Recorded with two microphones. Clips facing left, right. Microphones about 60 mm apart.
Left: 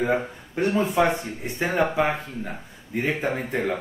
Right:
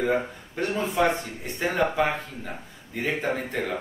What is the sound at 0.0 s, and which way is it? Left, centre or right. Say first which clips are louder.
Speech: left 1 dB; centre.